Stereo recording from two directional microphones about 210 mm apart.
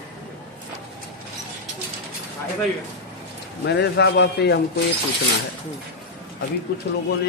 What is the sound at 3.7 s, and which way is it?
Speech, 55° left (ahead or behind).